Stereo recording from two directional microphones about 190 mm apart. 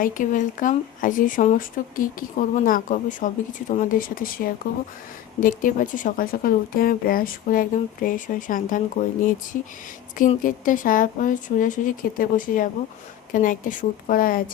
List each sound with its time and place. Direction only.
0.0 s a woman's voice: 45° left (ahead or behind)